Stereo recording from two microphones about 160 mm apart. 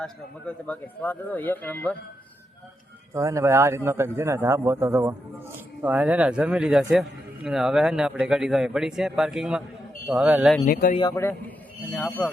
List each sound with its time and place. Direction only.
0.0 s speech: 10° left (ahead or behind)
3.1 s a man's voice: 20° right (ahead or behind)
10.7 s speech: 65° left (ahead or behind)
10.9 s a man's voice: 25° left (ahead or behind)
11.2 s a man's voice: 15° left (ahead or behind)